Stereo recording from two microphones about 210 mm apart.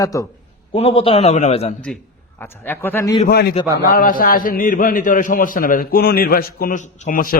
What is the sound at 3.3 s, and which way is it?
A man's voice, 50° left (ahead or behind).